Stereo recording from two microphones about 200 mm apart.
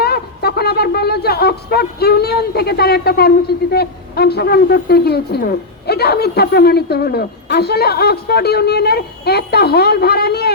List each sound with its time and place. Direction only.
0.0 s speech: 50° left (ahead or behind)